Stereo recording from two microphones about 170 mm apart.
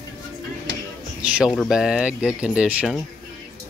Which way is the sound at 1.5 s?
Centre (ahead or behind).